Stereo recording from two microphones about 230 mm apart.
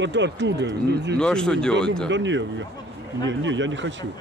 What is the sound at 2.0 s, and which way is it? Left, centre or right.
Speech, right.